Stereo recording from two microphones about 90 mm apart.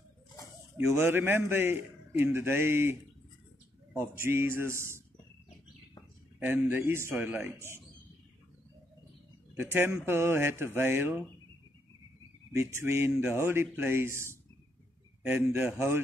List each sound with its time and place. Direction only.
0.8 s a man's voice: 25° right (ahead or behind)
6.4 s a man's voice: 20° right (ahead or behind)
9.6 s a man's voice: 30° right (ahead or behind)
12.5 s a man's voice: 30° right (ahead or behind)
15.2 s speech: 15° right (ahead or behind)